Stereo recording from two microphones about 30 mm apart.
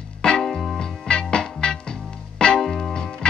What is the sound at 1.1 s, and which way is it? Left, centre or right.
Music, left.